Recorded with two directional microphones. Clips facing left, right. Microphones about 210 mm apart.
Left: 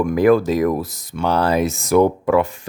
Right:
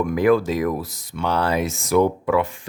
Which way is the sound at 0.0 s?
40° left (ahead or behind).